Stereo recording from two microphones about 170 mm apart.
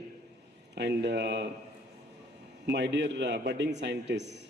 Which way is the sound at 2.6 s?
90° right.